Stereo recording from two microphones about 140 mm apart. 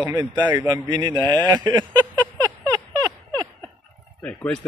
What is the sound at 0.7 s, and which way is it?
Speech, 30° right (ahead or behind).